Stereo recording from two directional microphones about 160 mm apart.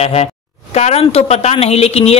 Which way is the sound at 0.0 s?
40° left (ahead or behind).